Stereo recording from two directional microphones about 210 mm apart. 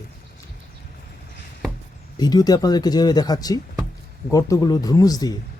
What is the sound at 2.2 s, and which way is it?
A man's voice, 20° left (ahead or behind).